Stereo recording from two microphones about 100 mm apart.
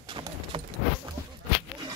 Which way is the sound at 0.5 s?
65° right (ahead or behind).